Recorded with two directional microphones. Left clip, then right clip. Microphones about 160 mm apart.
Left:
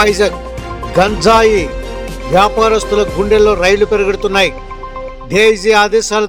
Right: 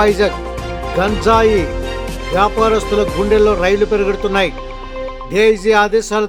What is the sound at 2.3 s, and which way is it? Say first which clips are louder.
Speech: left 3 dB; 35° left (ahead or behind).